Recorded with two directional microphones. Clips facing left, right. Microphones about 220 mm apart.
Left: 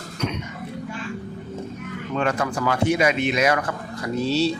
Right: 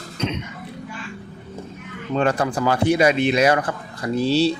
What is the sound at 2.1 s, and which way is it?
Speech, 35° right (ahead or behind).